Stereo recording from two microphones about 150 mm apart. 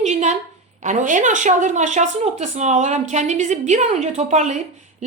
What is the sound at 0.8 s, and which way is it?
A woman's voice, 55° right (ahead or behind).